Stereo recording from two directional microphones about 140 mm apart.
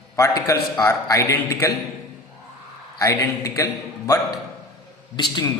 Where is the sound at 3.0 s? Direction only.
20° left (ahead or behind).